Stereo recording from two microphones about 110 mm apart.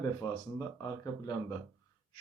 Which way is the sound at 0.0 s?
35° left (ahead or behind).